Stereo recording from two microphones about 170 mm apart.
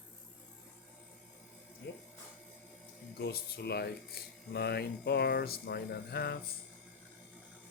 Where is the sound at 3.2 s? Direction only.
75° left (ahead or behind).